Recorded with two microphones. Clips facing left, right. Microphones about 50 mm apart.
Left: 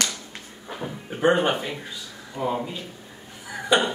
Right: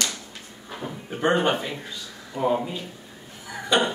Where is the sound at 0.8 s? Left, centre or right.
Centre.